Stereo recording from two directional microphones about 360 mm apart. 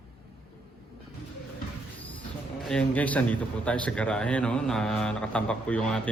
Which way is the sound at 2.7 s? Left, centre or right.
Centre.